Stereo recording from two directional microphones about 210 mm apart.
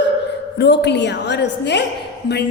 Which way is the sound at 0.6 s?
55° left (ahead or behind).